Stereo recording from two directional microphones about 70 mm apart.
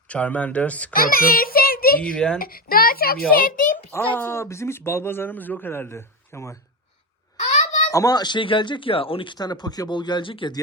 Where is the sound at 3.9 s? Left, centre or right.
Left.